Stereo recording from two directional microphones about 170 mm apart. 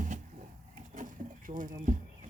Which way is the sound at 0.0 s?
45° right (ahead or behind).